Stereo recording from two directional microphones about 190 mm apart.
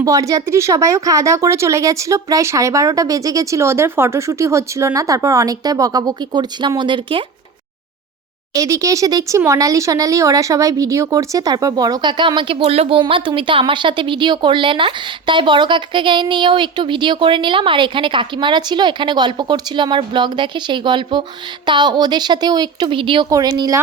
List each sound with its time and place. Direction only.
0.0 s speech: 15° right (ahead or behind)
8.5 s speech: 15° right (ahead or behind)